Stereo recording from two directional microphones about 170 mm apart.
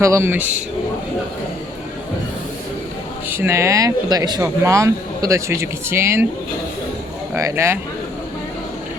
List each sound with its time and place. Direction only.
0.0 s speech: 15° right (ahead or behind)
3.2 s speech: 15° right (ahead or behind)
7.3 s speech: 15° right (ahead or behind)